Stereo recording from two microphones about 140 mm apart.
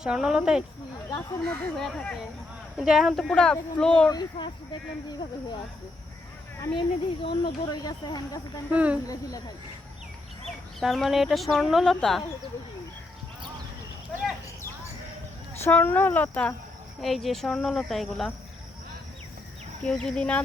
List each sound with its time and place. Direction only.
0.0 s speech: 5° right (ahead or behind)
1.1 s speech: 5° left (ahead or behind)
4.1 s speech: 30° left (ahead or behind)
6.7 s speech: 40° left (ahead or behind)
8.7 s speech: 10° right (ahead or behind)
10.8 s speech: centre (ahead or behind)
15.6 s speech: 15° left (ahead or behind)
17.0 s speech: centre (ahead or behind)
19.8 s speech: 5° left (ahead or behind)